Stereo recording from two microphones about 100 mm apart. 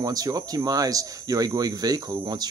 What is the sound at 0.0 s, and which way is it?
Speech, 40° right (ahead or behind).